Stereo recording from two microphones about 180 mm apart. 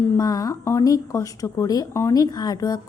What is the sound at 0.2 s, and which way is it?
A woman's voice, 20° left (ahead or behind).